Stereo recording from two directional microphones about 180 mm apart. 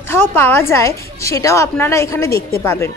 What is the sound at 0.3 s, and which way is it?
A woman's voice, 15° left (ahead or behind).